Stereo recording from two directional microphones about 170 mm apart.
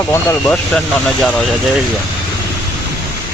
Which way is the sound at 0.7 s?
5° left (ahead or behind).